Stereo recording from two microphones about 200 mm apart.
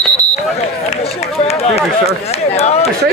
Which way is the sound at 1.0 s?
30° left (ahead or behind).